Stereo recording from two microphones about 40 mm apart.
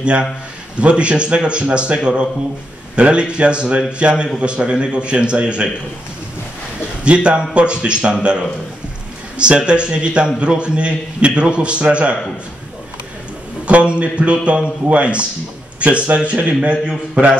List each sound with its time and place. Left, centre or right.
0.0 s a man's voice: right
7.0 s a man's voice: right
9.4 s a man's voice: right
13.7 s a man's voice: right